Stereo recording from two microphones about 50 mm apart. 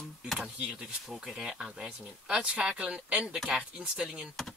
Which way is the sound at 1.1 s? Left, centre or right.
Centre.